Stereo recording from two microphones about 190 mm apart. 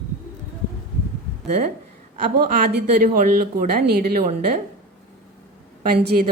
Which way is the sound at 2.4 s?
50° right (ahead or behind).